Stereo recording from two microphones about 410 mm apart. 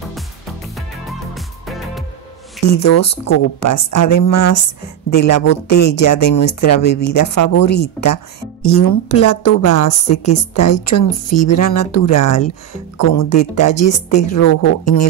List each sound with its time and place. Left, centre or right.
2.6 s speech: left